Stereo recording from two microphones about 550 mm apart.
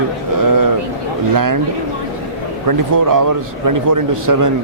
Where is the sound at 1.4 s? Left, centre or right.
Right.